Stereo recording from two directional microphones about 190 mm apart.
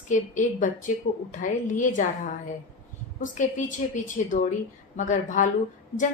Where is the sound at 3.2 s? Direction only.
40° left (ahead or behind).